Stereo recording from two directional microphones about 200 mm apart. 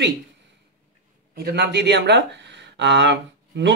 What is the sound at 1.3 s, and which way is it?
Speech, 55° right (ahead or behind).